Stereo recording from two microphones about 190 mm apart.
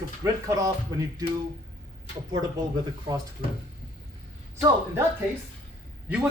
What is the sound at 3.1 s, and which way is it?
Speech, 20° right (ahead or behind).